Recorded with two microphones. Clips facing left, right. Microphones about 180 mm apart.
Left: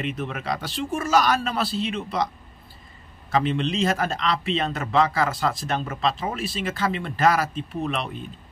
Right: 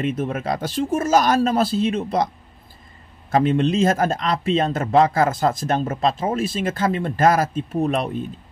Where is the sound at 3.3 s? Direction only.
50° right (ahead or behind).